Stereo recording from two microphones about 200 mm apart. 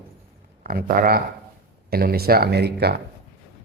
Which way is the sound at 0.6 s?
45° right (ahead or behind).